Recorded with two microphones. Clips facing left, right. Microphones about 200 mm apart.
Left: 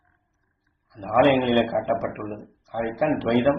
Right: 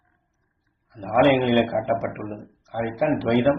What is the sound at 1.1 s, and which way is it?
Speech, 15° right (ahead or behind).